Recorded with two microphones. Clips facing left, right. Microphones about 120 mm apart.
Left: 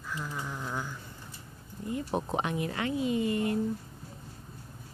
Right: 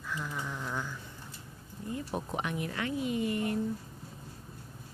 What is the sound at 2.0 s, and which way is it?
Speech, 25° left (ahead or behind).